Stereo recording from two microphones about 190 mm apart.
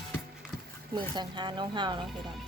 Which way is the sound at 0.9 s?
25° right (ahead or behind).